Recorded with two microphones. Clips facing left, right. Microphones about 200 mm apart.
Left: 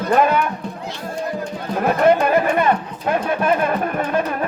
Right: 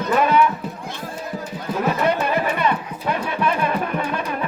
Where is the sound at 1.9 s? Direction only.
50° left (ahead or behind).